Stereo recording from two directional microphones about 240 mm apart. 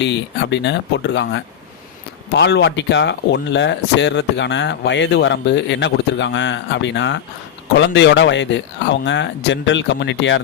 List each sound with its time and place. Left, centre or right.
0.0 s speech: left